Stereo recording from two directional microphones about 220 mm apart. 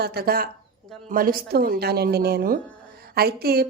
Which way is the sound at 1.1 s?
40° right (ahead or behind).